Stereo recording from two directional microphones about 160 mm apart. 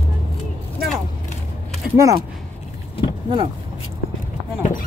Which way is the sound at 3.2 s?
30° right (ahead or behind).